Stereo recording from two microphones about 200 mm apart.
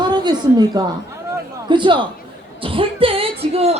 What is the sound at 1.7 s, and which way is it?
A man's voice, 25° right (ahead or behind).